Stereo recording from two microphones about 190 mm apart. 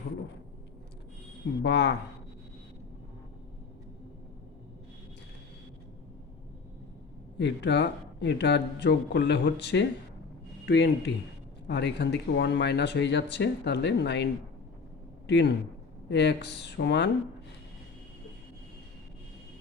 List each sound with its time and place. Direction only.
1.6 s speech: 60° left (ahead or behind)
7.3 s speech: 65° left (ahead or behind)
15.3 s speech: 65° left (ahead or behind)